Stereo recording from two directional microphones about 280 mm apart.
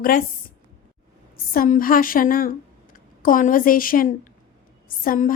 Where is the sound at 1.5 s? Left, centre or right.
Left.